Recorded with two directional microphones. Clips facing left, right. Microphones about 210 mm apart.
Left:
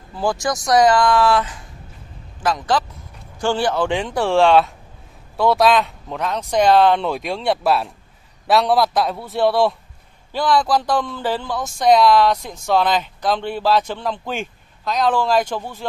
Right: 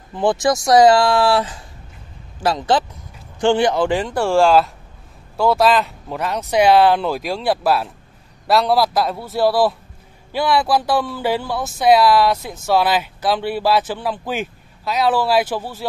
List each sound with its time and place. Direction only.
0.1 s speech: 20° right (ahead or behind)